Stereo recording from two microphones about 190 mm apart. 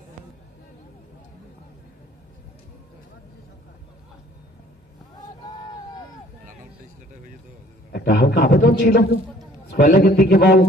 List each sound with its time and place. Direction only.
7.9 s a man's voice: 65° left (ahead or behind)